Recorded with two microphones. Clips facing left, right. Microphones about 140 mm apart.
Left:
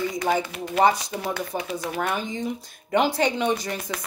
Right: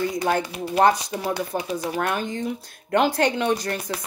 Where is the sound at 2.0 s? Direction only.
5° left (ahead or behind).